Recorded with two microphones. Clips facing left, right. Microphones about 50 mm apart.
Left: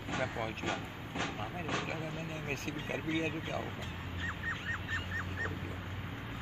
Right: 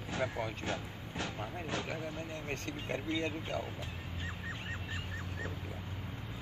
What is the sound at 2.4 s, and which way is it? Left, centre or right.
Speech, left.